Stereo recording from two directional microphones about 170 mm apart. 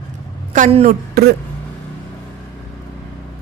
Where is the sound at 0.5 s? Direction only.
45° right (ahead or behind).